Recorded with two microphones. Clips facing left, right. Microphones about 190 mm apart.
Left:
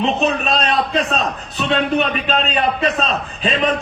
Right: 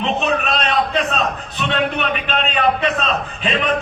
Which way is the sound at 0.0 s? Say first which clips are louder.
Left 2 dB; 35° left (ahead or behind).